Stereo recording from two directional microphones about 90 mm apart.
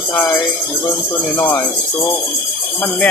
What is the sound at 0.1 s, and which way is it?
Speech, 20° left (ahead or behind).